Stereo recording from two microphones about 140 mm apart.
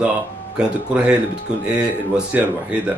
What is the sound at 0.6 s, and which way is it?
Speech, 10° right (ahead or behind).